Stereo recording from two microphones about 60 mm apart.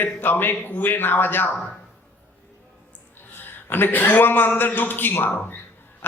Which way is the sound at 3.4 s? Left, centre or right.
Left.